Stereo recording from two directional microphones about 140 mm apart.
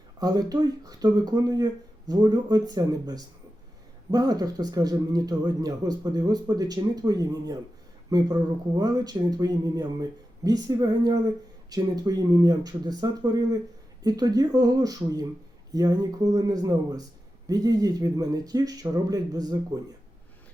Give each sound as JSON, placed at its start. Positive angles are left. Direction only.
{"t": 0.2, "sound": "a man's voice", "side_deg": -25}